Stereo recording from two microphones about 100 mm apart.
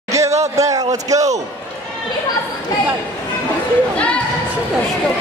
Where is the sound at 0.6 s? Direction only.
35° right (ahead or behind).